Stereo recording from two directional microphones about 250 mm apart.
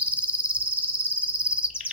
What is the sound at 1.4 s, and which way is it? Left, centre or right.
Bird vocalization, centre.